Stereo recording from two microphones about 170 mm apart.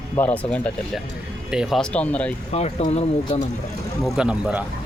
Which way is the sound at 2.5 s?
40° left (ahead or behind).